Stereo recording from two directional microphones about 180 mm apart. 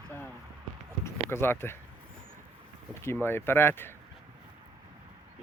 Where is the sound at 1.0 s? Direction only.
15° left (ahead or behind).